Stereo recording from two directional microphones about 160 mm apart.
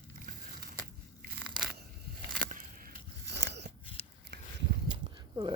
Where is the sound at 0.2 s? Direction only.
60° right (ahead or behind).